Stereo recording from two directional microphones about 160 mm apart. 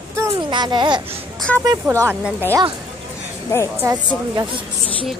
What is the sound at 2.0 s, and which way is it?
Speech, 15° right (ahead or behind).